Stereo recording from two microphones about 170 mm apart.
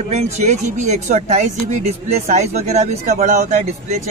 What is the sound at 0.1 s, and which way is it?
Speech, 45° right (ahead or behind).